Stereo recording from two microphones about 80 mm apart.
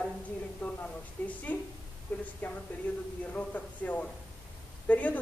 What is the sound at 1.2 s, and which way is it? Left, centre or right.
A woman's voice, centre.